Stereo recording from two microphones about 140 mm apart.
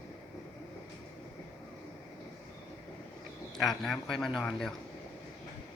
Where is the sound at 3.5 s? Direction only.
Centre (ahead or behind).